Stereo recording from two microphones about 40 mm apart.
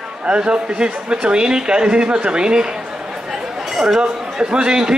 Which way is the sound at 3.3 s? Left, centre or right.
Centre.